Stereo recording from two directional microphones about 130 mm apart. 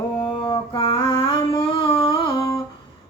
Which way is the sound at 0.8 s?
45° left (ahead or behind).